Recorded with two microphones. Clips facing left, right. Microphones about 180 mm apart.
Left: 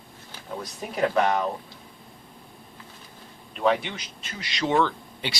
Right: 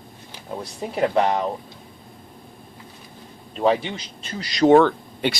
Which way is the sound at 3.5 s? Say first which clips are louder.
Right 3 dB; 30° right (ahead or behind).